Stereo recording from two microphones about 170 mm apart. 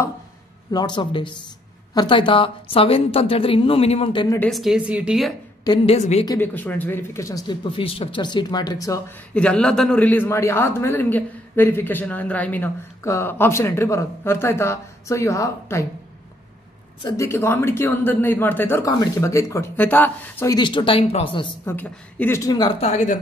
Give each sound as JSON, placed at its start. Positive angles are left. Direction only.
{"t": 0.7, "sound": "a woman's voice", "side_deg": 25}
{"t": 4.4, "sound": "speech", "side_deg": 0}
{"t": 5.9, "sound": "a woman's voice", "side_deg": 40}
{"t": 6.2, "sound": "speech", "side_deg": 15}
{"t": 9.3, "sound": "a man's voice", "side_deg": 5}
{"t": 17.0, "sound": "a man's voice", "side_deg": 15}
{"t": 20.5, "sound": "speech", "side_deg": 30}
{"t": 21.6, "sound": "a man's voice", "side_deg": 10}
{"t": 22.8, "sound": "a woman's voice", "side_deg": 40}